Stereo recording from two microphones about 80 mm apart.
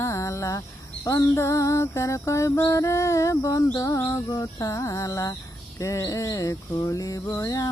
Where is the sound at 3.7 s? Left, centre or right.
Left.